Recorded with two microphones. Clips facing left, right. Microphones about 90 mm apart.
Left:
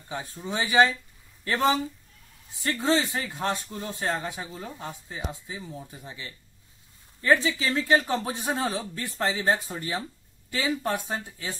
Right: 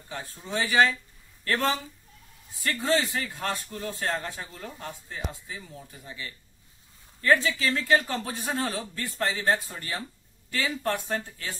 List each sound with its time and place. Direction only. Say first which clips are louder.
0.4 s speech: left 1 dB; 15° left (ahead or behind)